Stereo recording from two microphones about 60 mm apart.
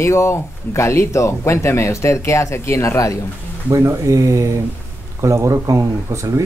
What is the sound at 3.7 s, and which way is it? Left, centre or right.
Speech, right.